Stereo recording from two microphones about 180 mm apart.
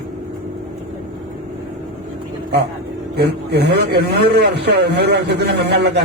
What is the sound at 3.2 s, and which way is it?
A man's voice, 65° right (ahead or behind).